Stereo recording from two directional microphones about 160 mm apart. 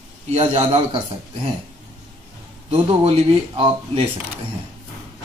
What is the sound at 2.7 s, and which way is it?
Speech, 40° right (ahead or behind).